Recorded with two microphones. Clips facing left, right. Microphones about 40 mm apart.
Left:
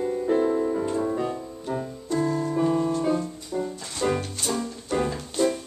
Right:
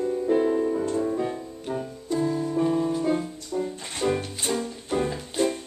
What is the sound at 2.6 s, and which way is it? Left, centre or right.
Music, centre.